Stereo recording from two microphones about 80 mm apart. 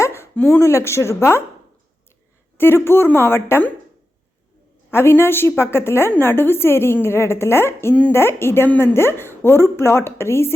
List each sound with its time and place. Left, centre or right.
0.0 s speech: left
2.6 s a woman's voice: left
4.9 s a woman's voice: left